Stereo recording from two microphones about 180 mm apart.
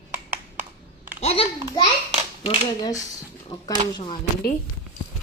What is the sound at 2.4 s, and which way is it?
A woman's voice, 25° left (ahead or behind).